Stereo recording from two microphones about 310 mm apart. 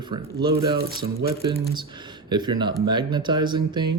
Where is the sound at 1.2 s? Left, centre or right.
Centre.